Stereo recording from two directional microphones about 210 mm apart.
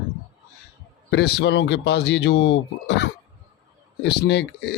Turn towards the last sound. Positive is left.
turn(degrees=55)  # may be behind; listen again after turning